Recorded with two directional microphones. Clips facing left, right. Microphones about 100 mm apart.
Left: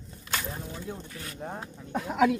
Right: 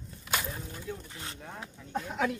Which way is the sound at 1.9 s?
90° left.